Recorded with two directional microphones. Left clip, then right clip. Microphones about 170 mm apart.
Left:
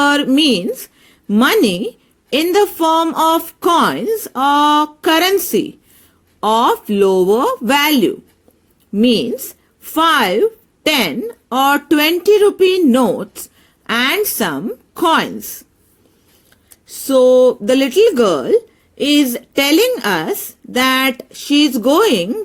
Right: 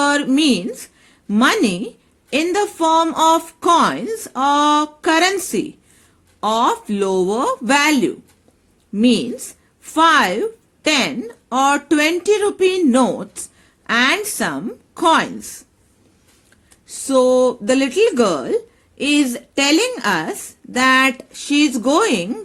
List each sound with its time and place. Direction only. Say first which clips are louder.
0.0 s a woman's voice: left 3 dB; 25° left (ahead or behind)
16.8 s a woman's voice: left 4 dB; 25° left (ahead or behind)